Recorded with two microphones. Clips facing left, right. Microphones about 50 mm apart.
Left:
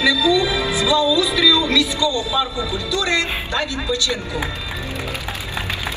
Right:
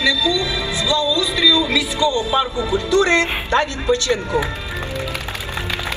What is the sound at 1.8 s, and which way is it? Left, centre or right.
A man's voice, right.